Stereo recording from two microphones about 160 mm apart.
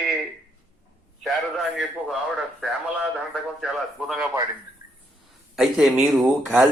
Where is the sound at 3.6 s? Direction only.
Centre (ahead or behind).